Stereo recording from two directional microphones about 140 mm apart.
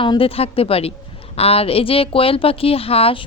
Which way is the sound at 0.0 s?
40° left (ahead or behind).